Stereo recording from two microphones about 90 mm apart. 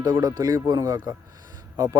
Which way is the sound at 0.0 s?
45° right (ahead or behind).